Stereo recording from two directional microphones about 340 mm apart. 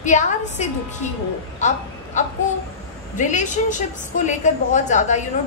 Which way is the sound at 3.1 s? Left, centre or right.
Left.